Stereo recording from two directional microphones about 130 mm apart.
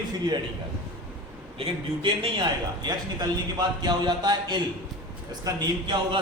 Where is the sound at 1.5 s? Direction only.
40° right (ahead or behind).